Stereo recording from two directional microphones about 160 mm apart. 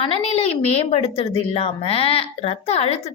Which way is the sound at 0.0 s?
35° left (ahead or behind).